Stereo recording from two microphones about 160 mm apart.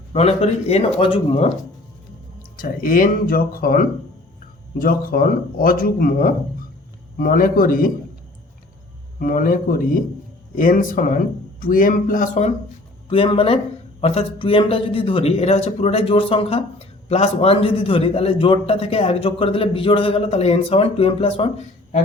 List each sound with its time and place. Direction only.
0.1 s a man's voice: 40° left (ahead or behind)
2.6 s speech: 60° left (ahead or behind)
9.1 s speech: 60° left (ahead or behind)
13.1 s a man's voice: 35° left (ahead or behind)